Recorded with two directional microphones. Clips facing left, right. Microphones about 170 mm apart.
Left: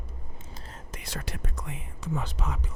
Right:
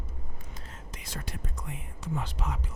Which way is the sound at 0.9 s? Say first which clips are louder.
Left 3 dB; 65° left (ahead or behind).